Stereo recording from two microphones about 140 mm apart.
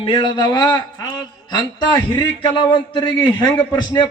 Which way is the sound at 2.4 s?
35° left (ahead or behind).